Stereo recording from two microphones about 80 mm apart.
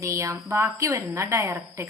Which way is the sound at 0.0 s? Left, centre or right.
Right.